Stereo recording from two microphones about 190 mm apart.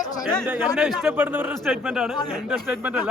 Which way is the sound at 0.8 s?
5° right (ahead or behind).